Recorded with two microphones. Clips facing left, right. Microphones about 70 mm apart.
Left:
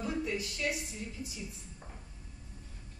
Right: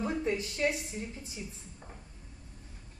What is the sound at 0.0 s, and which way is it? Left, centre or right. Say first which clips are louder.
A woman's voice: right 3 dB; right.